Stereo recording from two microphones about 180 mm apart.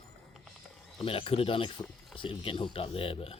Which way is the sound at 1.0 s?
30° left (ahead or behind).